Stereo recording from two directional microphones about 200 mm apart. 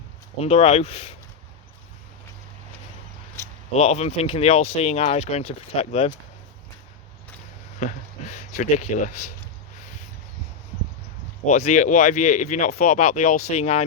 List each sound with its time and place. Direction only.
0.4 s speech: 30° left (ahead or behind)
3.4 s zipper: 15° left (ahead or behind)
3.8 s speech: 35° left (ahead or behind)
7.9 s speech: 35° left (ahead or behind)
11.4 s speech: 35° left (ahead or behind)